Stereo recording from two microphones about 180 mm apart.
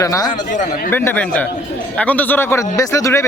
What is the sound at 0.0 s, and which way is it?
Speech, 20° left (ahead or behind).